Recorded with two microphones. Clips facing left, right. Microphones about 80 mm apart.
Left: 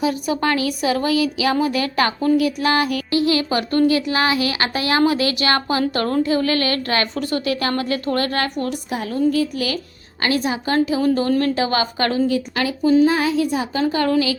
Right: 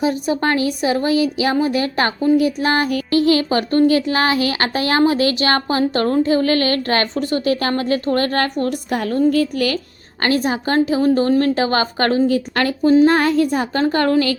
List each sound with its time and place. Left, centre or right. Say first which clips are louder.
0.0 s a woman's voice: right 2 dB; right
8.9 s a woman's voice: right 3 dB; right
12.5 s a woman's voice: right 2 dB; right